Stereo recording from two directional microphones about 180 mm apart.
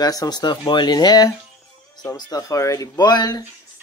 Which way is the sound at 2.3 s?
20° left (ahead or behind).